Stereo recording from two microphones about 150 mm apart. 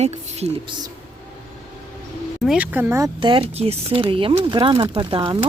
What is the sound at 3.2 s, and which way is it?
Speech, 35° right (ahead or behind).